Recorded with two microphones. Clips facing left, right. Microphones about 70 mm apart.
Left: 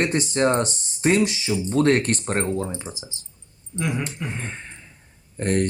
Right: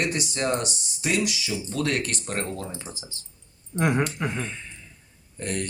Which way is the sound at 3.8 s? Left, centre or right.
Right.